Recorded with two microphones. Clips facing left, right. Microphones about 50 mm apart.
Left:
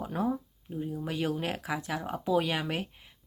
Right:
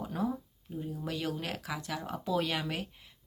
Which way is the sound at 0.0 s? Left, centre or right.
Left.